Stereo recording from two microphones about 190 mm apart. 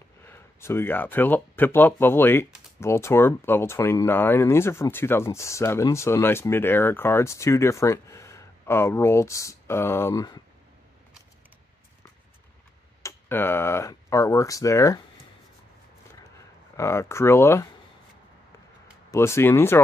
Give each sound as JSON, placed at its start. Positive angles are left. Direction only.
{"t": 0.2, "sound": "speech", "side_deg": 15}
{"t": 13.0, "sound": "speech", "side_deg": 10}
{"t": 16.7, "sound": "speech", "side_deg": 15}
{"t": 19.0, "sound": "speech", "side_deg": 15}